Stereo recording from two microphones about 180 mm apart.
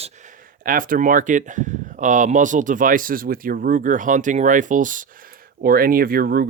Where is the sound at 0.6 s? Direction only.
50° right (ahead or behind).